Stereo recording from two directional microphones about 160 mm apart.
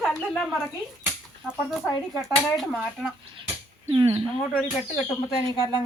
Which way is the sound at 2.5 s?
5° right (ahead or behind).